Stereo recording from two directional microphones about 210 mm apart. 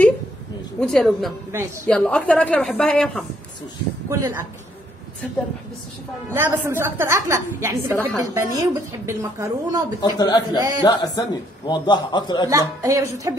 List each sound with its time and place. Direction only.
0.7 s a woman's voice: centre (ahead or behind)
4.1 s a woman's voice: 15° right (ahead or behind)
6.3 s a woman's voice: 10° right (ahead or behind)
9.9 s a man's voice: 20° left (ahead or behind)
12.4 s a woman's voice: 15° right (ahead or behind)